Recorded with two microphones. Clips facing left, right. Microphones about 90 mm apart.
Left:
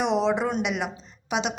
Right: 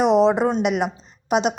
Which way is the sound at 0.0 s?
40° right (ahead or behind).